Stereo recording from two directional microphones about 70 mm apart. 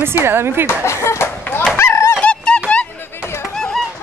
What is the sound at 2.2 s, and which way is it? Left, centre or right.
Honk, centre.